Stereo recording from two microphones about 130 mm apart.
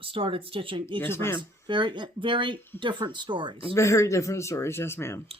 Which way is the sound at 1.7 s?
35° right (ahead or behind).